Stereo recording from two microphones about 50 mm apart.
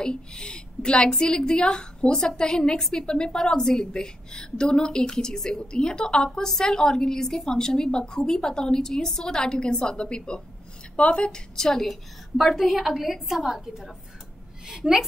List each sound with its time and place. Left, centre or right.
0.0 s a woman's voice: centre
11.5 s a woman's voice: centre